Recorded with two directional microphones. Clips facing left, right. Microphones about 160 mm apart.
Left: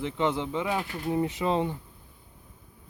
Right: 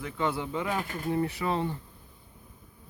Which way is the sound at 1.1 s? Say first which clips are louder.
Left 3 dB; 20° left (ahead or behind).